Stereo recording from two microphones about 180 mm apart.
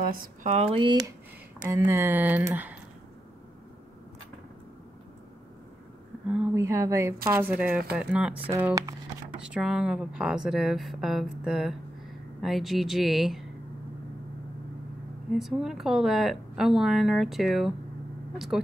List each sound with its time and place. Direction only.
0.0 s speech: 50° right (ahead or behind); by 2.7 s 10° right (ahead or behind)
6.2 s a sound: 5° right (ahead or behind)
6.5 s a woman's voice: 15° right (ahead or behind)
15.3 s a woman's voice: centre (ahead or behind)